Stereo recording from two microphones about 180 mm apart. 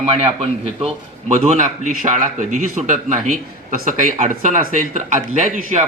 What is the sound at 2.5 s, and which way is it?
Speech, 45° right (ahead or behind).